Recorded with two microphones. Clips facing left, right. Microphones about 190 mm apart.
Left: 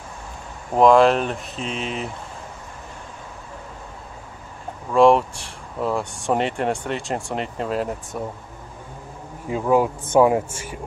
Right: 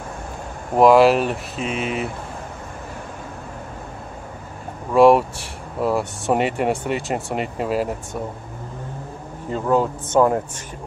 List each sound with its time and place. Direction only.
0.7 s speech: 5° right (ahead or behind)
4.9 s speech: 5° right (ahead or behind)
9.5 s speech: 10° left (ahead or behind)